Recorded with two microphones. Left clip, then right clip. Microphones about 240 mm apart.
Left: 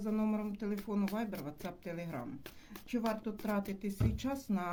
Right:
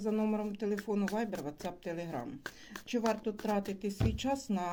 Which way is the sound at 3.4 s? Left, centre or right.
Left.